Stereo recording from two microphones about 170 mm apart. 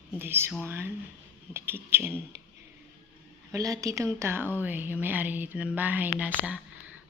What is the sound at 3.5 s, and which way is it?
Speech, 20° right (ahead or behind).